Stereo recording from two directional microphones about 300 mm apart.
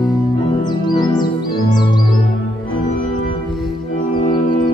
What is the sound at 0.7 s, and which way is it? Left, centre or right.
Music, centre.